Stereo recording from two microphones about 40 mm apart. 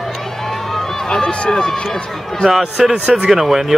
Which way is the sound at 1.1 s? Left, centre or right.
Centre.